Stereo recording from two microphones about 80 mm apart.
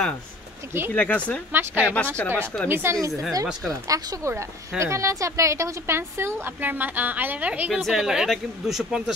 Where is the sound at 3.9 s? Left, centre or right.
Right.